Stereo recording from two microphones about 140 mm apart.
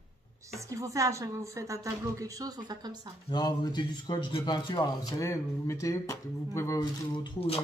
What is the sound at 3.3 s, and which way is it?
Speech, 30° left (ahead or behind).